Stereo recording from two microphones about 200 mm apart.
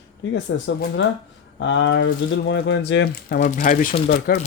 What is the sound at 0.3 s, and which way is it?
Speech, 65° left (ahead or behind).